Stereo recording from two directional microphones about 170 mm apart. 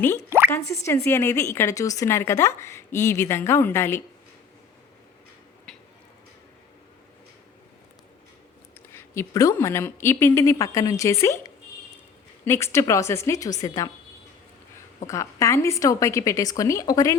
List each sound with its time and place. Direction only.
0.3 s plop: 15° right (ahead or behind)
0.9 s speech: 15° left (ahead or behind)
5.7 s a sound: centre (ahead or behind)
8.9 s speech: 15° left (ahead or behind)
15.0 s speech: 20° left (ahead or behind)